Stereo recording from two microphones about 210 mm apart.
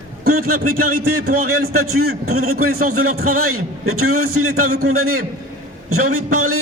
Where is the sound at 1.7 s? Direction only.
90° right.